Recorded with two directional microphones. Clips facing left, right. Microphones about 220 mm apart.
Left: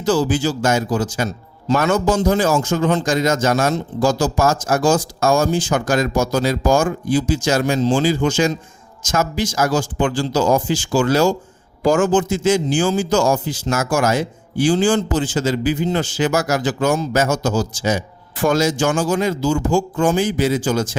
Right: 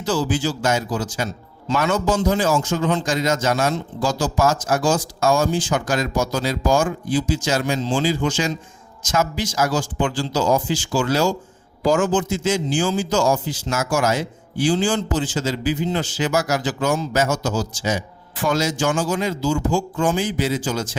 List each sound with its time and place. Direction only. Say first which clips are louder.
0.0 s a man's voice: left 4 dB; 45° left (ahead or behind)